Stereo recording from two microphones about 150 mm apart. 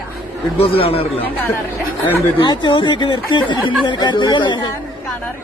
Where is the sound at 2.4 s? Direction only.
30° left (ahead or behind).